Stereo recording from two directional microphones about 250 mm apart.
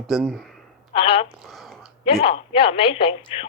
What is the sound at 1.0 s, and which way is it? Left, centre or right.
Speech, left.